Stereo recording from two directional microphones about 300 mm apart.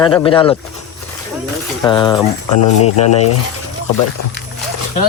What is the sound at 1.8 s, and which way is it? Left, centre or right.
Speech, centre.